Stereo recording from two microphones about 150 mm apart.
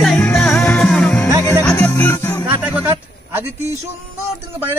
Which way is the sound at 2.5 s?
10° right (ahead or behind).